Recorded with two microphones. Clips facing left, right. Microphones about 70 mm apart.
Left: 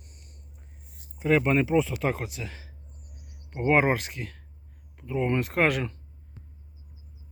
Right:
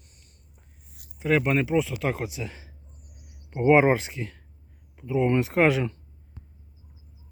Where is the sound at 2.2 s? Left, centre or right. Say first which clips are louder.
Right 3 dB; centre.